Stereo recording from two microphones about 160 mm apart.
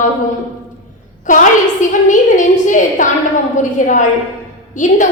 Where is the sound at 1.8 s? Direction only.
50° left (ahead or behind).